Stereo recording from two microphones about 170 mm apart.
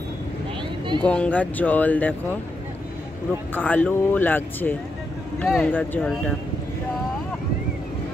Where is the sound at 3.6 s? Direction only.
10° left (ahead or behind).